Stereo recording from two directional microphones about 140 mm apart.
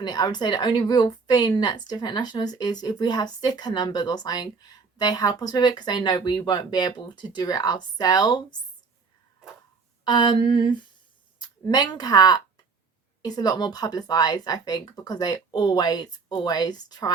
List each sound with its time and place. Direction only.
0.0 s a woman's voice: 30° left (ahead or behind)
10.1 s a sound: 30° left (ahead or behind)
11.3 s a woman's voice: 30° left (ahead or behind)